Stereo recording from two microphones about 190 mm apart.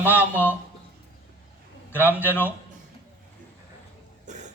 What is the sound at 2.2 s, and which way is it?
Speech, 10° left (ahead or behind).